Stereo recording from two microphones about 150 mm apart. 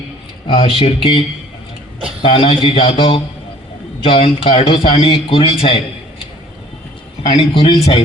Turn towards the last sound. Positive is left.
turn(degrees=35)  # may be behind; listen again after turning